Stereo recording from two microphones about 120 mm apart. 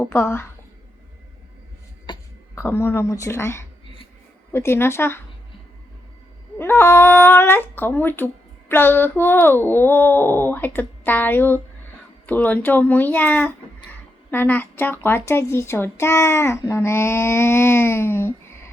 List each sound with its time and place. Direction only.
0.0 s speech: 20° left (ahead or behind)
2.1 s a sound: 40° left (ahead or behind)
2.6 s speech: 20° left (ahead or behind)
6.6 s speech: 20° left (ahead or behind)